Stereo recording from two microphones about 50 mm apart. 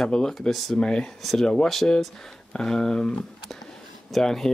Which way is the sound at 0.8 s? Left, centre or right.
Centre.